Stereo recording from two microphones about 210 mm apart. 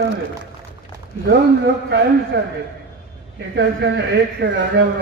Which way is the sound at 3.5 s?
55° right (ahead or behind).